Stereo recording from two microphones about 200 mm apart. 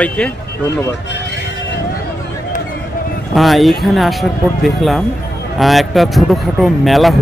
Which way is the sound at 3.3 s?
Centre (ahead or behind).